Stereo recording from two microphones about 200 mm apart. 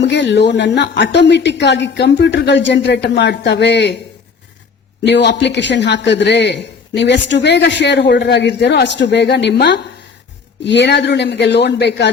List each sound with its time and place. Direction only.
0.0 s speech: 60° left (ahead or behind)
5.0 s speech: 60° left (ahead or behind)